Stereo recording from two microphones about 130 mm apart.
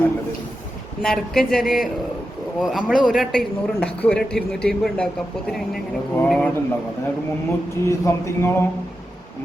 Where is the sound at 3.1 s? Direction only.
Centre (ahead or behind).